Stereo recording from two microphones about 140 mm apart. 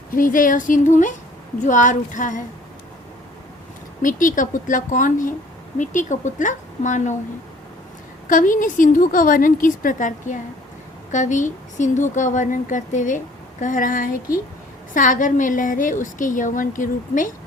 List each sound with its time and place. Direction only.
0.1 s a woman's voice: 75° left (ahead or behind)
4.0 s a woman's voice: 70° left (ahead or behind)
8.3 s a woman's voice: 70° left (ahead or behind)